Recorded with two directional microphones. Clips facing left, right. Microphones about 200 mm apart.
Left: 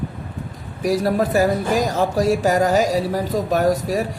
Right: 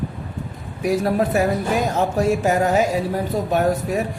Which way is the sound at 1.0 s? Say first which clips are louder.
Left 2 dB; 35° left (ahead or behind).